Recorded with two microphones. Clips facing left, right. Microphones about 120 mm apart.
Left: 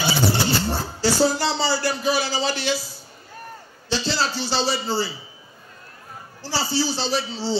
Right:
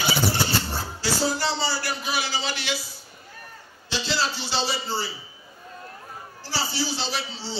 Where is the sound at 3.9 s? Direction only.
35° left (ahead or behind).